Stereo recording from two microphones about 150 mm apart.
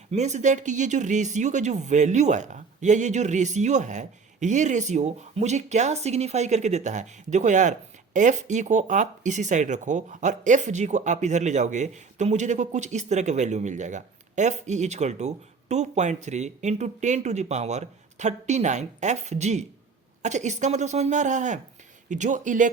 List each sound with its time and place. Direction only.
0.1 s speech: 50° right (ahead or behind)